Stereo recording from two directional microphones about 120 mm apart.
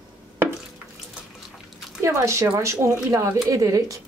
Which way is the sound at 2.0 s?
25° right (ahead or behind).